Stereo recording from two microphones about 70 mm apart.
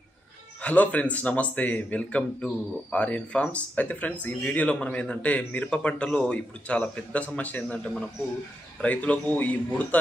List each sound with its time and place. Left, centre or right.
0.6 s speech: centre
7.7 s a man's voice: centre